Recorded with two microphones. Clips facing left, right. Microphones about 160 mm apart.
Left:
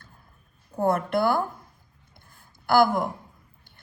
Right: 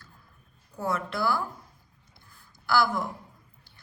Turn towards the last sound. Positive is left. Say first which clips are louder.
# left 5 dB
turn(degrees=50)  # may be behind; listen again after turning